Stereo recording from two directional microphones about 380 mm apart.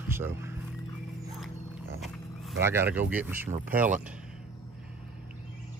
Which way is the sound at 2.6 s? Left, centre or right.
Centre.